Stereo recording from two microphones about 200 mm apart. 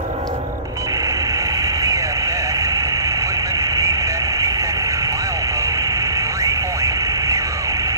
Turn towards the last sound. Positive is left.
turn(degrees=-15)  # may be behind; listen again after turning